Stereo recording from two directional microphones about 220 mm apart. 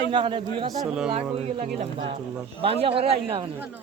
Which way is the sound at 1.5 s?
35° right (ahead or behind).